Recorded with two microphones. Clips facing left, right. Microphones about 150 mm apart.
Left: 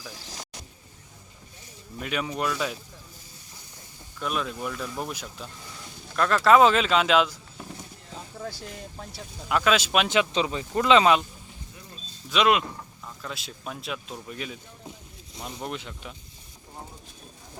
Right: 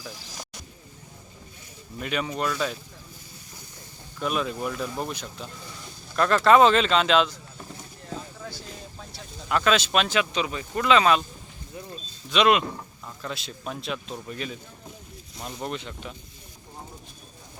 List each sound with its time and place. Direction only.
2.0 s a man's voice: centre (ahead or behind)
4.2 s a man's voice: centre (ahead or behind)
9.5 s speech: 5° left (ahead or behind)
10.1 s speech: 25° left (ahead or behind)
12.3 s a man's voice: 5° left (ahead or behind)